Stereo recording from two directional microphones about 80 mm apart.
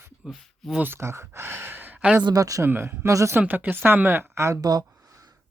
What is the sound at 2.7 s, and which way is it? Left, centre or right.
Speech, right.